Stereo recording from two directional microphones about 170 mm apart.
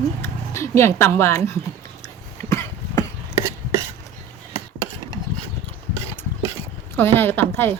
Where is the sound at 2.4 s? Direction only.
20° left (ahead or behind).